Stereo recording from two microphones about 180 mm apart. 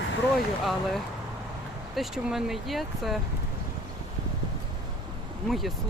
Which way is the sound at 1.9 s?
Centre (ahead or behind).